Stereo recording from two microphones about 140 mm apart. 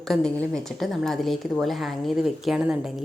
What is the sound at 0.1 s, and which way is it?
A woman's voice, 5° left (ahead or behind).